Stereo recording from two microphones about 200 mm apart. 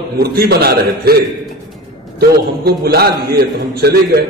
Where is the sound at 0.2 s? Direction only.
50° right (ahead or behind).